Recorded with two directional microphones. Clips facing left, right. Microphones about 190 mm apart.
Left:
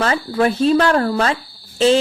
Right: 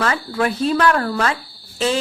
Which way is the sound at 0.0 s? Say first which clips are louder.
Left 3 dB; 25° left (ahead or behind).